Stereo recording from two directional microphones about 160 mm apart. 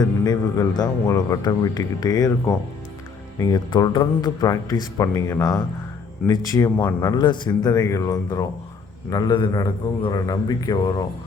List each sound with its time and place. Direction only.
0.0 s a man's voice: 20° left (ahead or behind)
3.3 s a man's voice: 25° left (ahead or behind)